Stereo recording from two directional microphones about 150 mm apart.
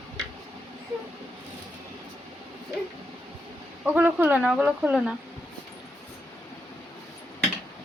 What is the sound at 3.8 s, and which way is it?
Speech, 10° right (ahead or behind).